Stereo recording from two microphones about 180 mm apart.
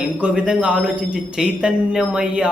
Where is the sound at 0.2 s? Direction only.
5° right (ahead or behind).